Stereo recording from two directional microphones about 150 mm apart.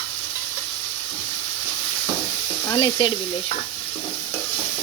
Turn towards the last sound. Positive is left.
turn(degrees=35)  # may be behind; listen again after turning